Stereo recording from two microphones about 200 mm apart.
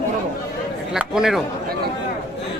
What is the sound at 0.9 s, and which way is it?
Speech, 5° right (ahead or behind).